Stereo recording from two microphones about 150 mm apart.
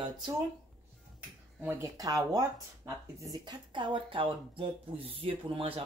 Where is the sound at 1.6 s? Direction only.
15° right (ahead or behind).